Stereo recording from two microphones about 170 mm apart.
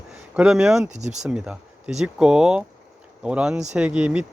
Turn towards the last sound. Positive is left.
turn(degrees=-5)  # may be behind; listen again after turning